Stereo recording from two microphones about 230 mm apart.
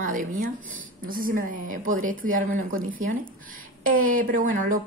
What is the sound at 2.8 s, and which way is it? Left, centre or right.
Speech, right.